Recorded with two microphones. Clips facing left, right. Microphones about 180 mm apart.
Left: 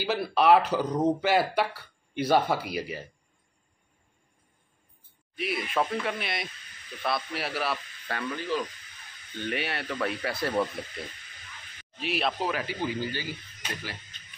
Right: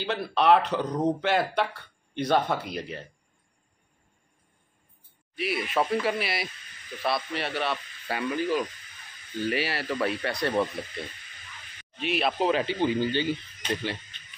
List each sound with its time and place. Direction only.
0.0 s speech: 5° left (ahead or behind)
5.3 s speech: centre (ahead or behind)
8.1 s speech: 10° right (ahead or behind)
12.4 s speech: 25° right (ahead or behind)